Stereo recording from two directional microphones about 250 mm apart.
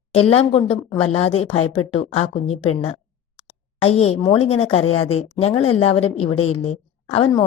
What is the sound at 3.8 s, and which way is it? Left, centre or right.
Speech, left.